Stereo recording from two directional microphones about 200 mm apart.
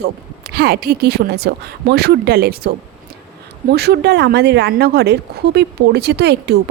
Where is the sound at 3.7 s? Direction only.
55° right (ahead or behind).